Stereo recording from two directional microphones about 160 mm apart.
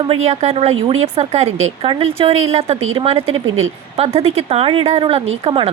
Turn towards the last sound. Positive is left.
turn(degrees=-35)  # may be behind; listen again after turning